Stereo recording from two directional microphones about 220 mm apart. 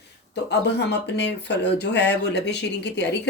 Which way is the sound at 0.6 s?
50° left (ahead or behind).